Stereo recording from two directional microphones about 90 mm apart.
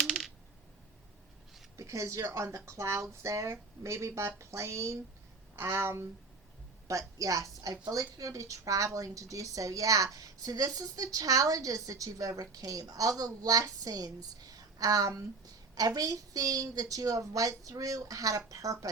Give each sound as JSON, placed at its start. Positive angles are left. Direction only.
{"t": 0.0, "sound": "a sound", "side_deg": 0}
{"t": 1.7, "sound": "a woman's voice", "side_deg": -35}
{"t": 6.8, "sound": "a woman's voice", "side_deg": -40}